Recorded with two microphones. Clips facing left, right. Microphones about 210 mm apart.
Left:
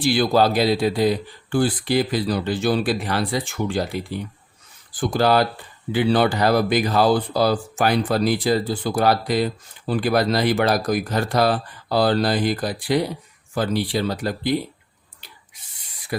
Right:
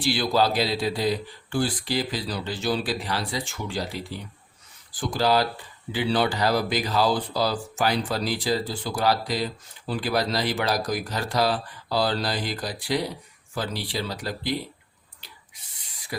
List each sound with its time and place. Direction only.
0.0 s speech: 50° left (ahead or behind)